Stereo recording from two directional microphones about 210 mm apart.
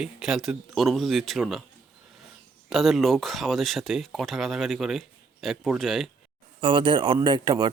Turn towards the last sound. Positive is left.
turn(degrees=-20)  # may be behind; listen again after turning